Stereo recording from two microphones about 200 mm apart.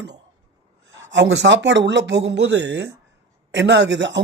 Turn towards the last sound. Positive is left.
turn(degrees=-65)  # may be behind; listen again after turning